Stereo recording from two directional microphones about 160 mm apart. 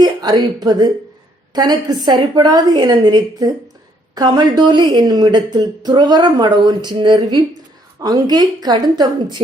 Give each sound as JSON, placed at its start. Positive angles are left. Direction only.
{"t": 0.0, "sound": "a woman's voice", "side_deg": -25}